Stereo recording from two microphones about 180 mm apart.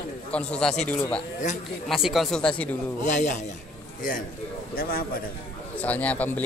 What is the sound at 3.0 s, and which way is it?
Speech, 40° left (ahead or behind).